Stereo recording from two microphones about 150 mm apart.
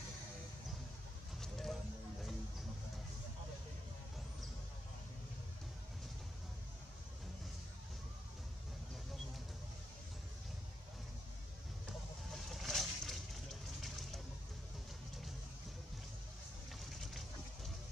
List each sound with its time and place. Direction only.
1.4 s vehicle: centre (ahead or behind)
12.3 s vehicle: centre (ahead or behind)
13.7 s a sound: centre (ahead or behind)